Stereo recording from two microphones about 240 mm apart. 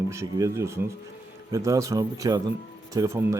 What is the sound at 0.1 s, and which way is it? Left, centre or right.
Speech, centre.